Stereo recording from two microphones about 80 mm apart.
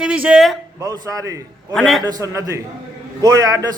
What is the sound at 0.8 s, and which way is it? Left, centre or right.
Speech, right.